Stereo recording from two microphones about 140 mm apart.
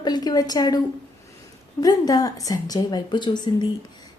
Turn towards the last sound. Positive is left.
turn(degrees=30)  # may be behind; listen again after turning